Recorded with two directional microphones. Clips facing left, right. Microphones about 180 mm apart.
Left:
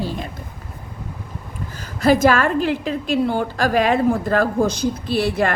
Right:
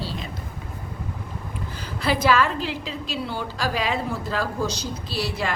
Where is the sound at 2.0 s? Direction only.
45° left (ahead or behind).